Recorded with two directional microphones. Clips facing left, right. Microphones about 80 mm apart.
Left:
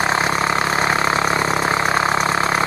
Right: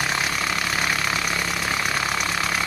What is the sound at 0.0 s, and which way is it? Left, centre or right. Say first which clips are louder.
Vehicle: left 7 dB; left.